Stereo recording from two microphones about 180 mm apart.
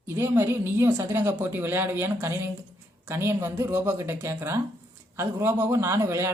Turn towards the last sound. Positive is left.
turn(degrees=-15)  # may be behind; listen again after turning